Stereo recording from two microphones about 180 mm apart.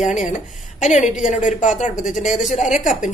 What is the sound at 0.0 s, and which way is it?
A woman's voice, 45° left (ahead or behind).